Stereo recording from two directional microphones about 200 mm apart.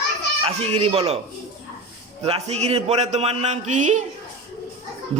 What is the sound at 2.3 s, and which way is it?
A man's voice, 30° right (ahead or behind).